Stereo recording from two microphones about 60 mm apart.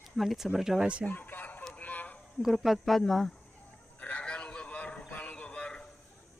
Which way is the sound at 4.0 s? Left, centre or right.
Left.